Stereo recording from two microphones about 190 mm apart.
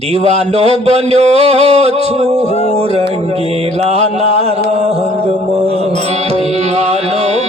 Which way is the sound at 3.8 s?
35° right (ahead or behind).